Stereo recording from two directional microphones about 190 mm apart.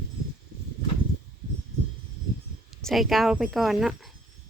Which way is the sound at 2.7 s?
Centre (ahead or behind).